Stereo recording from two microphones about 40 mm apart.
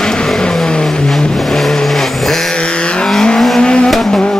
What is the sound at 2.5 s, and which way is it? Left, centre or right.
Vehicle, left.